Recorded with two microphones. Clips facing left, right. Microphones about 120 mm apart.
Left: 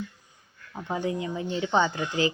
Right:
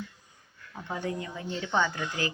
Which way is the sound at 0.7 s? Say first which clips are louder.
Left 4 dB; 20° left (ahead or behind).